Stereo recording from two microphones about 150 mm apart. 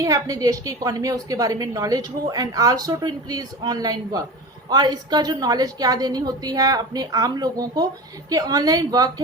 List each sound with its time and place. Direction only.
0.0 s a woman's voice: 25° right (ahead or behind)